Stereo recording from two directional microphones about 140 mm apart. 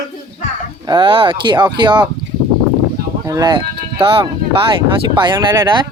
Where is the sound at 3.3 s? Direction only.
30° right (ahead or behind).